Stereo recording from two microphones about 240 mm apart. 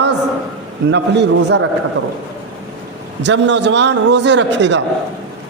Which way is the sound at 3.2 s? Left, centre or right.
Right.